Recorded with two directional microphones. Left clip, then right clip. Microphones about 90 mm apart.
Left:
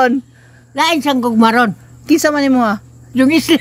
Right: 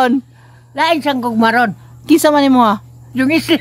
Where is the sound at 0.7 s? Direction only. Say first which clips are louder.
Even; 15° right (ahead or behind).